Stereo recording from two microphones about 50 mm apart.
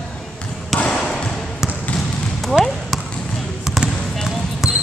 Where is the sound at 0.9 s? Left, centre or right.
Centre.